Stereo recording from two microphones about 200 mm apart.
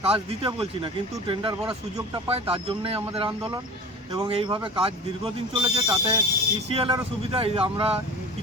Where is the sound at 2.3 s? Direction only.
30° right (ahead or behind).